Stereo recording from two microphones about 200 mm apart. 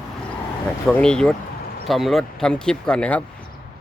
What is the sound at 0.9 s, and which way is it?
Speech, 5° left (ahead or behind).